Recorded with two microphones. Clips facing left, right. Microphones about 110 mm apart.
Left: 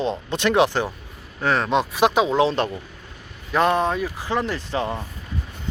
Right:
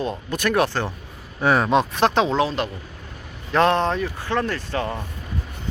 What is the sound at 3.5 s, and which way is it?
Speech, 5° left (ahead or behind).